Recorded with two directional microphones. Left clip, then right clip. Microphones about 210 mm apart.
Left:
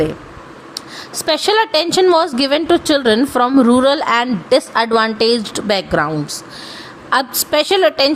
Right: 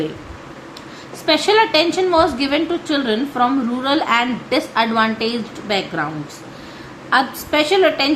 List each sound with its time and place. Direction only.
1.2 s a woman's voice: 50° left (ahead or behind)
7.1 s a woman's voice: 55° left (ahead or behind)